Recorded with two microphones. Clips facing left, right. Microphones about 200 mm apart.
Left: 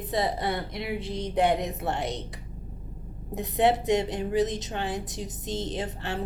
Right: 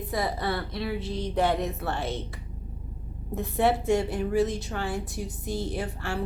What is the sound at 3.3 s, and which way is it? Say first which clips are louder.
A woman's voice: left 1 dB; 20° left (ahead or behind).